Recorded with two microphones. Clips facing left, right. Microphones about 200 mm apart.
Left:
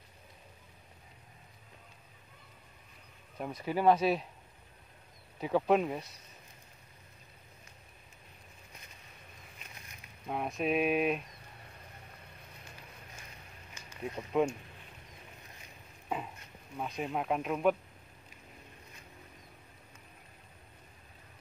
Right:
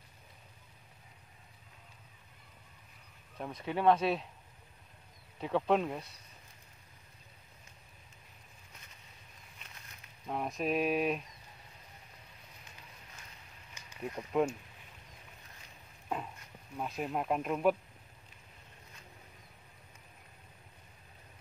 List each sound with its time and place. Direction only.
3.3 s speech: 5° left (ahead or behind)
5.4 s speech: 5° left (ahead or behind)
10.2 s speech: 5° left (ahead or behind)
13.8 s a sound: 15° right (ahead or behind)
14.4 s speech: centre (ahead or behind)
16.7 s speech: centre (ahead or behind)